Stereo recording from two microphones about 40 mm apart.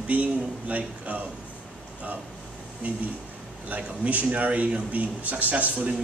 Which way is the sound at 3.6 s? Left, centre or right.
Right.